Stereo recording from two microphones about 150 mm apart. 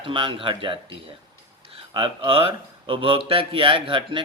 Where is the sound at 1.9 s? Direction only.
35° right (ahead or behind).